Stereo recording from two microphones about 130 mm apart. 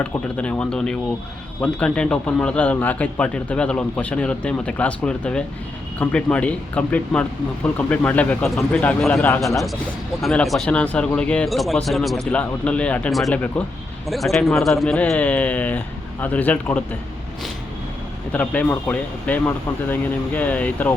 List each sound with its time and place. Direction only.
0.0 s a man's voice: 10° left (ahead or behind)
9.3 s a man's voice: 25° left (ahead or behind)
10.2 s a man's voice: centre (ahead or behind)
18.3 s a man's voice: 10° left (ahead or behind)